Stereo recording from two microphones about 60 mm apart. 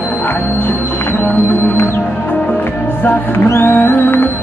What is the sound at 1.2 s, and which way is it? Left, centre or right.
Music, left.